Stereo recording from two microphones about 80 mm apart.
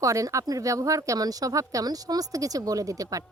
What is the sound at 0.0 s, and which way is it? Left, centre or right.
Speech, right.